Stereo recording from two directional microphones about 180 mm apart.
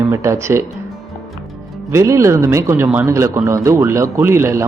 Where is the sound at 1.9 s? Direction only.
15° right (ahead or behind).